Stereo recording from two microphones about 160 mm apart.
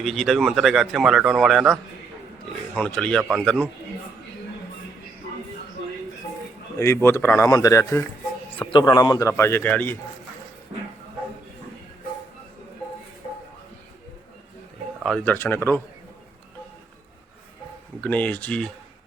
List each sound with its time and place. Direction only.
0.0 s a man's voice: centre (ahead or behind)
6.7 s speech: 15° left (ahead or behind)
8.5 s speech: 30° left (ahead or behind); by 10.0 s 10° left (ahead or behind)
15.0 s speech: 5° left (ahead or behind)
18.0 s speech: 10° left (ahead or behind)